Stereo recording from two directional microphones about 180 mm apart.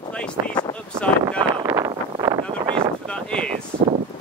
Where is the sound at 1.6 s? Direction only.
15° right (ahead or behind).